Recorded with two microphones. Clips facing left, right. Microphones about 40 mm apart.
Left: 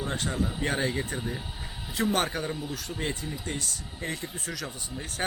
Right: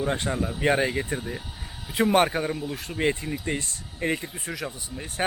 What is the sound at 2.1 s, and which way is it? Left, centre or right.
Speech, right.